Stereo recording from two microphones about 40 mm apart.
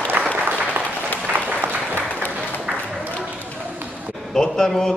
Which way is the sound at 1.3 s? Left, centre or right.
Right.